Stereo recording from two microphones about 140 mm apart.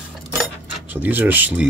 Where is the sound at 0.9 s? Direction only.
10° right (ahead or behind).